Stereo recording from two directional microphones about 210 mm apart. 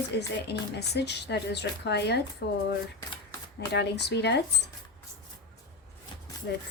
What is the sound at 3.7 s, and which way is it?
A woman's voice, 55° left (ahead or behind).